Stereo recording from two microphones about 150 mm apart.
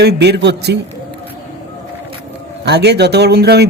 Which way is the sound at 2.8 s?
90° right.